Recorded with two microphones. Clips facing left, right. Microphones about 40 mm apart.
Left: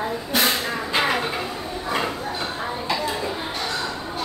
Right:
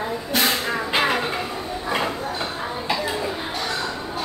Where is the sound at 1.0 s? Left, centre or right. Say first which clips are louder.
Even; centre.